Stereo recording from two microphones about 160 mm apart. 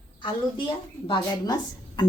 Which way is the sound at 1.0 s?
30° left (ahead or behind).